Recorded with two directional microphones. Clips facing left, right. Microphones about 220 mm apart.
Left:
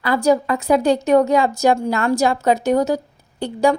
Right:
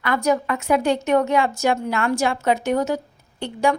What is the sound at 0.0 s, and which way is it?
A woman's voice, 35° left (ahead or behind).